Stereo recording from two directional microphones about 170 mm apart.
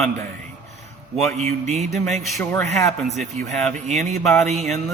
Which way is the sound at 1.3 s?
40° right (ahead or behind).